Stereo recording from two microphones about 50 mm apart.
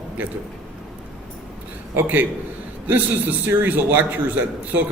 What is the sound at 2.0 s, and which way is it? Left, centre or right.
A man's voice, right.